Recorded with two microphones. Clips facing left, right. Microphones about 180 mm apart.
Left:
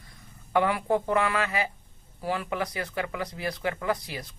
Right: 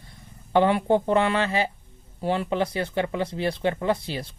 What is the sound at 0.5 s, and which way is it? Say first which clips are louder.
Speech: right 5 dB; 30° right (ahead or behind).